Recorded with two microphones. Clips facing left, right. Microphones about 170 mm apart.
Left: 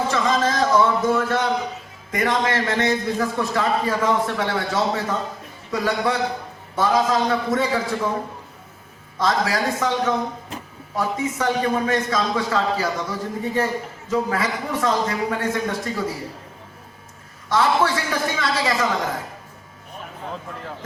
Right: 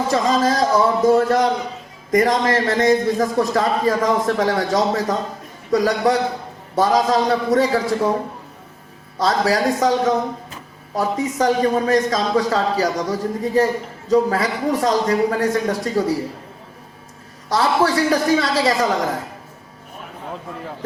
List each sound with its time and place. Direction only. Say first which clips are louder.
0.1 s a man's voice: right 3 dB; 35° right (ahead or behind)
9.1 s a man's voice: right 3 dB; 35° right (ahead or behind)
17.5 s a man's voice: right 2 dB; 35° right (ahead or behind)